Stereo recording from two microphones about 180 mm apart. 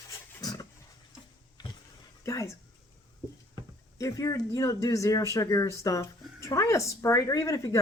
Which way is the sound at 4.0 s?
20° left (ahead or behind).